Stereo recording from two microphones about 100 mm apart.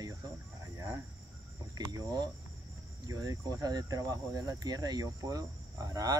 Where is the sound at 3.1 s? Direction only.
35° right (ahead or behind).